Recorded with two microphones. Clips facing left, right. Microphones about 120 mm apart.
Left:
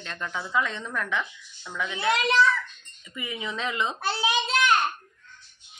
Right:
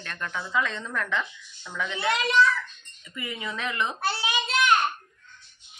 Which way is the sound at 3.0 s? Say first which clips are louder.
Even; 15° left (ahead or behind).